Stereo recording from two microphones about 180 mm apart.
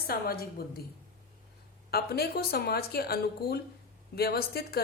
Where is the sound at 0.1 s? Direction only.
55° left (ahead or behind).